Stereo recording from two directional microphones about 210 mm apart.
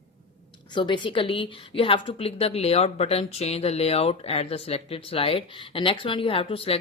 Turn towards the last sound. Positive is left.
turn(degrees=25)  # may be behind; listen again after turning